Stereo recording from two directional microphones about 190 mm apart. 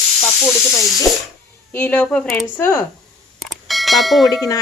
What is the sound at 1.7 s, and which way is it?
A woman's voice, 5° left (ahead or behind).